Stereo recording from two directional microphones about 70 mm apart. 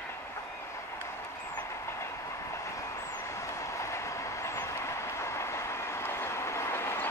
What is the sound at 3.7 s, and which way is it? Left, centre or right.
Train, left.